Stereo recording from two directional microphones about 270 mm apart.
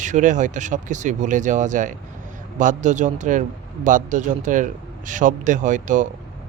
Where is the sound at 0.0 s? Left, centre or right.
Right.